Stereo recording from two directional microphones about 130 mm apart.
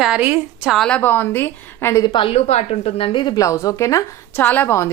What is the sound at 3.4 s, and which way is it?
A woman's voice, 25° left (ahead or behind).